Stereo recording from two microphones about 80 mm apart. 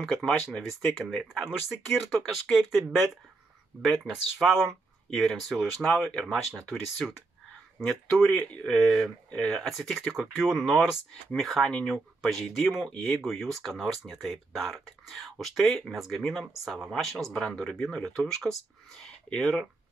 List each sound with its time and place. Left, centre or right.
0.0 s speech: centre
4.1 s speech: centre
7.8 s speech: centre